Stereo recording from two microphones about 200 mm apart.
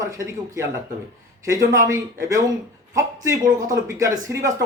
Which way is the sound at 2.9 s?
15° right (ahead or behind).